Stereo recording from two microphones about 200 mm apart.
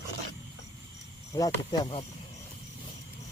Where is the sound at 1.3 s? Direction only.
15° left (ahead or behind).